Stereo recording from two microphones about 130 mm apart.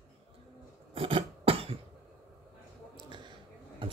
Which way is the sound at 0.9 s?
45° right (ahead or behind).